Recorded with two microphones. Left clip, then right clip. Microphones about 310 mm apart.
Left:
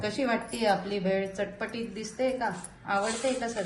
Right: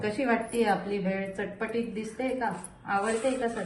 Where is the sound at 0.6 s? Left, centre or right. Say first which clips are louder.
Even; left.